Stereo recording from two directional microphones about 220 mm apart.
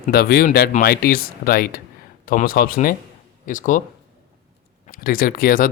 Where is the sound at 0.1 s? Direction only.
45° left (ahead or behind).